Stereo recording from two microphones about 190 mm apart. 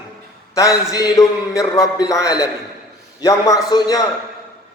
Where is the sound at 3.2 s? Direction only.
20° left (ahead or behind).